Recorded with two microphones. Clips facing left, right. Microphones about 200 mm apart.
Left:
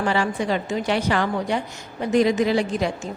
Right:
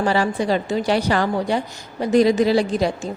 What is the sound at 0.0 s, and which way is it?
A woman's voice, 35° right (ahead or behind).